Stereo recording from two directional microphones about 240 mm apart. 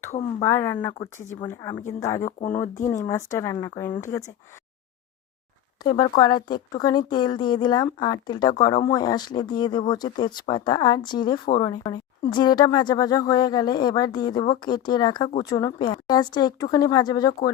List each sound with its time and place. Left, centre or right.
0.1 s speech: left
0.4 s a woman's voice: centre
0.9 s a woman's voice: left
2.2 s speech: left
3.1 s a woman's voice: centre
5.8 s a woman's voice: centre